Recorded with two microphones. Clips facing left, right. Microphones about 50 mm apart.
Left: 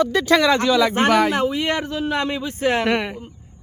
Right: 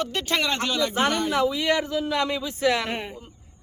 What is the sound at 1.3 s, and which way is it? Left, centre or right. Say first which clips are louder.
Speech: left 2 dB; left.